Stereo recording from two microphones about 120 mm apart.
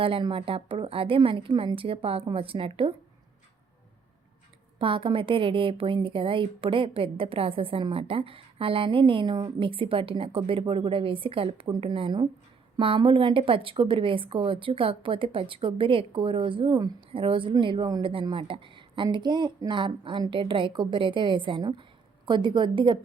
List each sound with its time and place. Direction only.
0.0 s a woman's voice: 45° right (ahead or behind)
4.8 s a woman's voice: 45° right (ahead or behind)